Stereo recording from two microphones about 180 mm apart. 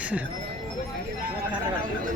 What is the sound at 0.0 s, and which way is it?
Speech, 5° right (ahead or behind).